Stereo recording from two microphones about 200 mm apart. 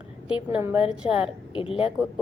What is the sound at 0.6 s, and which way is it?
Speech, 10° right (ahead or behind).